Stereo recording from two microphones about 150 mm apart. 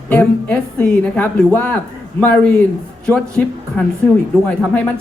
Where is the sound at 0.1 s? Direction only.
10° left (ahead or behind).